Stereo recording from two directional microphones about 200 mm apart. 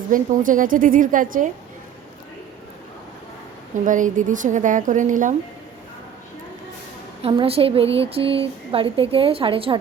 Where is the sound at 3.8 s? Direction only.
40° right (ahead or behind).